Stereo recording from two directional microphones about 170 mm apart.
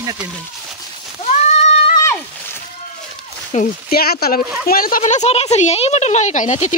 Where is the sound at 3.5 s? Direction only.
45° left (ahead or behind).